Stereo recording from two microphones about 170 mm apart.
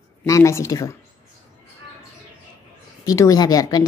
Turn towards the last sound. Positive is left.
turn(degrees=25)  # may be behind; listen again after turning